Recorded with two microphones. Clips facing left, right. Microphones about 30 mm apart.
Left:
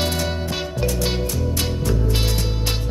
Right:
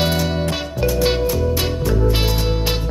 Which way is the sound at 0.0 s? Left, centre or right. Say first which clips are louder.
Right 4 dB; centre.